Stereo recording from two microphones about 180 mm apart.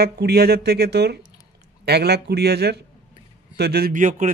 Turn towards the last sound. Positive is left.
turn(degrees=-45)  # may be behind; listen again after turning